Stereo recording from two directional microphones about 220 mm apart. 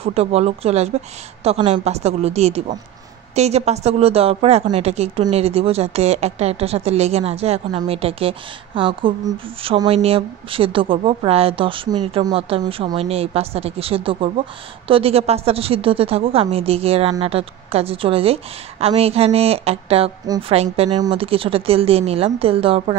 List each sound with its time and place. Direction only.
0.0 s speech: 30° right (ahead or behind)